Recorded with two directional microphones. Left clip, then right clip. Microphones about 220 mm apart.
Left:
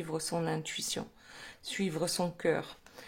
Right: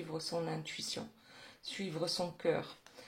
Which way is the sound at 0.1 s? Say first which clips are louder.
Left 4 dB; 30° left (ahead or behind).